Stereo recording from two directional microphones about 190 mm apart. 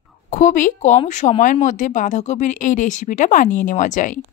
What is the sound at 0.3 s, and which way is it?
A woman's voice, 45° left (ahead or behind).